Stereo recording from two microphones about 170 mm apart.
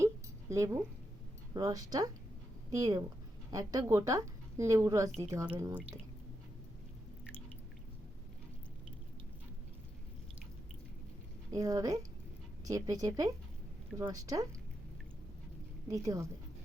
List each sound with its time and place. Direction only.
0.5 s a woman's voice: 15° right (ahead or behind)
11.5 s a woman's voice: 20° right (ahead or behind)
15.9 s a woman's voice: 20° right (ahead or behind)